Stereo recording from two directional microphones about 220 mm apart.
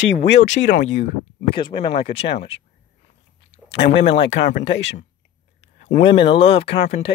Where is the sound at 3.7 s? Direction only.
25° left (ahead or behind).